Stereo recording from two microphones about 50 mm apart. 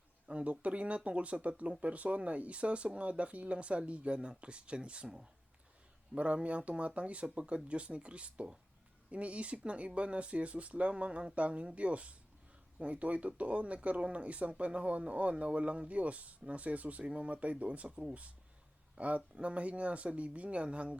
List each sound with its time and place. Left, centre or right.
0.3 s a sound: right
0.5 s speech: right
6.1 s speech: right